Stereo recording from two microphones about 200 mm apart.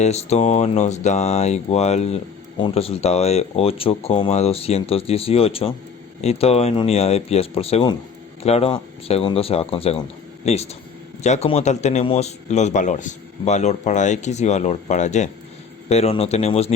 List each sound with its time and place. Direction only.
0.0 s speech: 35° left (ahead or behind)